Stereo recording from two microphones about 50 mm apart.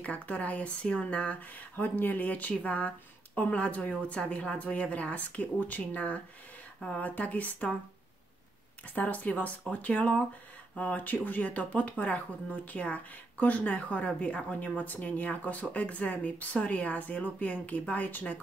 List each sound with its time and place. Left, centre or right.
0.0 s speech: left
1.4 s speech: left
8.8 s speech: left